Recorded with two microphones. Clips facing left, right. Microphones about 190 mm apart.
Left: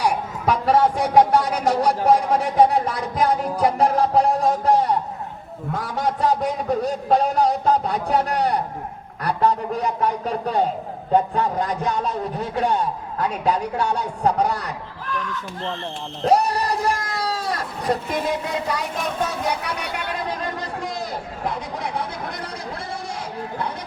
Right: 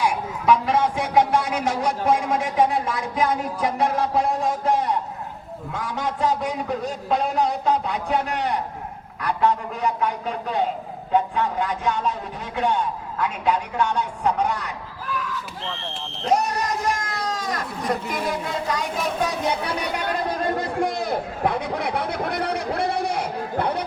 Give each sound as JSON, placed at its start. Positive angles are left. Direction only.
{"t": 0.0, "sound": "speech", "side_deg": 40}
{"t": 15.0, "sound": "speech", "side_deg": -5}
{"t": 16.3, "sound": "speech", "side_deg": 35}
{"t": 19.3, "sound": "speech", "side_deg": -25}
{"t": 20.6, "sound": "speech", "side_deg": -60}